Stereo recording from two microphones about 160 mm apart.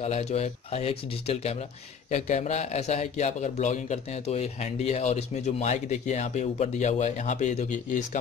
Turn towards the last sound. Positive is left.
turn(degrees=50)  # may be behind; listen again after turning